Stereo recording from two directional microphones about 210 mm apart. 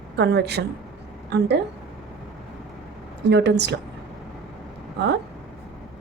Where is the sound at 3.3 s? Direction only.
55° right (ahead or behind).